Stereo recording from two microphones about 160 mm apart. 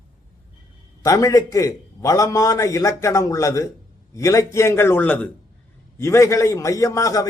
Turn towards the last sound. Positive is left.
turn(degrees=20)  # may be behind; listen again after turning